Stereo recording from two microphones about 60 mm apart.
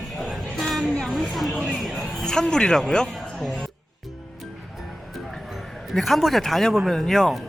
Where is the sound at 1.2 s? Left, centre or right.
Centre.